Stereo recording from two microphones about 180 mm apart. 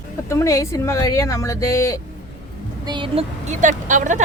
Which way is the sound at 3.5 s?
45° right (ahead or behind).